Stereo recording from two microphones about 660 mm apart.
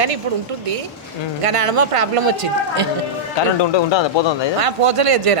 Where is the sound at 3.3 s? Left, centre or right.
Left.